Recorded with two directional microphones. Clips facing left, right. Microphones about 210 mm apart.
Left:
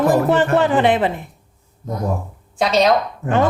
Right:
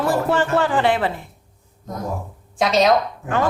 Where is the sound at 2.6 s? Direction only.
Centre (ahead or behind).